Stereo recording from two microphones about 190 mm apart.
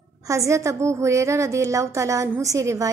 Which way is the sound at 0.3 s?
15° right (ahead or behind).